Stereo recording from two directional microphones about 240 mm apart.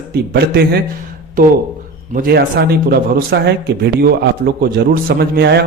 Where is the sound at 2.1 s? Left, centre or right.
Right.